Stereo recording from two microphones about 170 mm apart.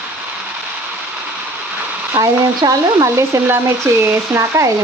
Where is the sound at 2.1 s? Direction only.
20° right (ahead or behind).